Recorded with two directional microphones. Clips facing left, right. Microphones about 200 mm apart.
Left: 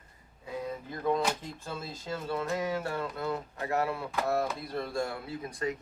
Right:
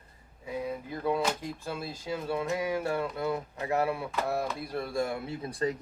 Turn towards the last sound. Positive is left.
turn(degrees=-30)  # may be behind; listen again after turning